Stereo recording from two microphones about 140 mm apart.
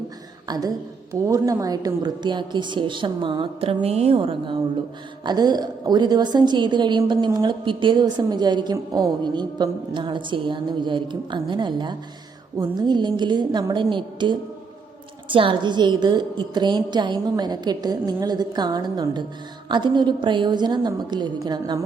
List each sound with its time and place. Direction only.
0.4 s a woman's voice: 30° right (ahead or behind)